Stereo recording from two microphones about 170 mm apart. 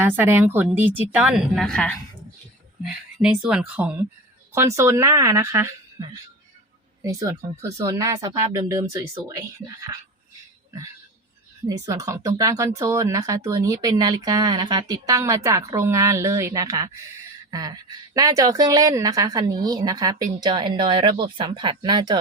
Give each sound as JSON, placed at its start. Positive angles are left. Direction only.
{"t": 0.0, "sound": "a woman's voice", "side_deg": -10}
{"t": 11.9, "sound": "a woman's voice", "side_deg": -20}
{"t": 17.5, "sound": "a sound", "side_deg": -20}
{"t": 18.1, "sound": "speech", "side_deg": -20}